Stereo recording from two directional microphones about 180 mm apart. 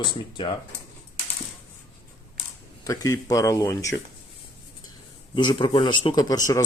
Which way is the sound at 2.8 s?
20° left (ahead or behind).